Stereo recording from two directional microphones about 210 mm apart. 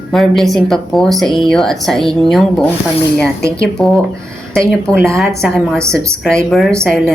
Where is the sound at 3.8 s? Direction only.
Centre (ahead or behind).